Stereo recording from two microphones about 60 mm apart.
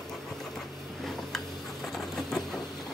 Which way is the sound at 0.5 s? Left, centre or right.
Centre.